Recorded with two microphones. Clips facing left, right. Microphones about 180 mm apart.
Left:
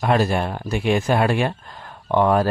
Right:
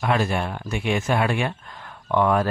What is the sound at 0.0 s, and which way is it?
Speech, 35° left (ahead or behind).